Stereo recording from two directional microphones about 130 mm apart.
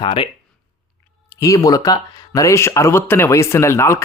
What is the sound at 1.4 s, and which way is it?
Speech, 25° left (ahead or behind).